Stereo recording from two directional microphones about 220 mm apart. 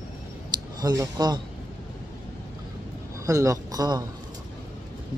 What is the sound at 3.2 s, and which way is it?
Speech, 15° right (ahead or behind).